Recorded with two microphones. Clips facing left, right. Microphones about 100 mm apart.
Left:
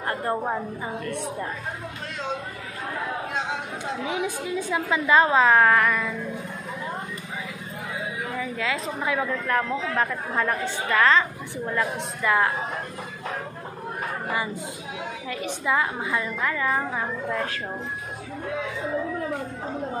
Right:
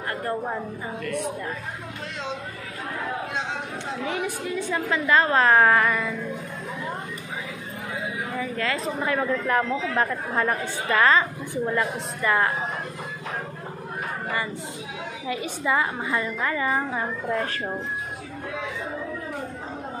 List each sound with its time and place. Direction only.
0.1 s a sound: 30° left (ahead or behind)
4.1 s a woman's voice: 15° left (ahead or behind)
5.3 s a woman's voice: centre (ahead or behind)
8.4 s a woman's voice: centre (ahead or behind)
15.2 s a woman's voice: 5° right (ahead or behind)